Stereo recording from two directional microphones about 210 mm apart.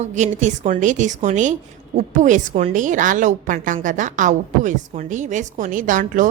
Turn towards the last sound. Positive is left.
turn(degrees=-40)  # may be behind; listen again after turning